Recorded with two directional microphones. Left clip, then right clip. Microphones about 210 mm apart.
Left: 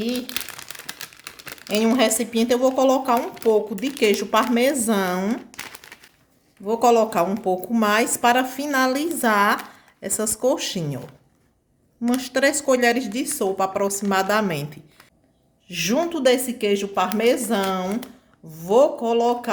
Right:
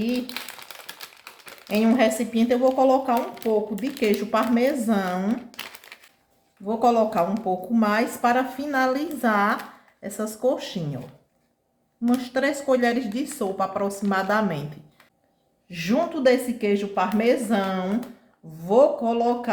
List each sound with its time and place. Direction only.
1.6 s speech: 35° left (ahead or behind)
6.7 s speech: 40° left (ahead or behind)
12.0 s speech: 40° left (ahead or behind)
15.7 s speech: 35° left (ahead or behind)